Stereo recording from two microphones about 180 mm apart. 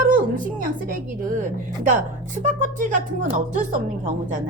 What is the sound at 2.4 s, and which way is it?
Speech, 45° right (ahead or behind).